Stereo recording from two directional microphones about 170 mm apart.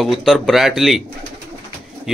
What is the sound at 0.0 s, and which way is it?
Speech, centre (ahead or behind).